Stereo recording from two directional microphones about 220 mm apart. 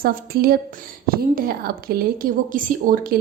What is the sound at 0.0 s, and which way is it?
A woman's voice, 45° right (ahead or behind).